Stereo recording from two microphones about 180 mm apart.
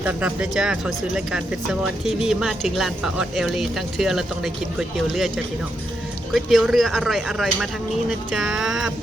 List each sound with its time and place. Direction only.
0.0 s speech: 5° right (ahead or behind)
6.3 s speech: centre (ahead or behind)